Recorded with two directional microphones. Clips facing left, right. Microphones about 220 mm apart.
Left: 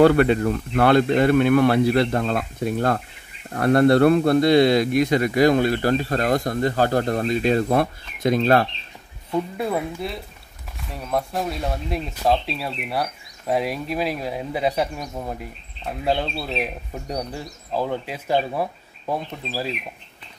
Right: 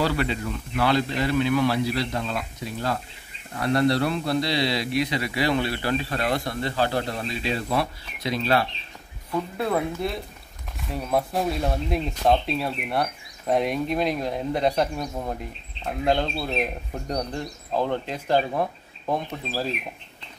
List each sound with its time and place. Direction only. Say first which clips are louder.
0.0 s a man's voice: left 10 dB; 55° left (ahead or behind)
9.6 s speech: even; 5° left (ahead or behind)